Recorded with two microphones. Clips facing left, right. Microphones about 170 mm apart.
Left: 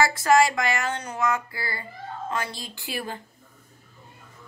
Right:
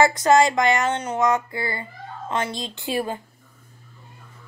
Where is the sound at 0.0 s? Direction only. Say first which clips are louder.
Right 3 dB; 20° right (ahead or behind).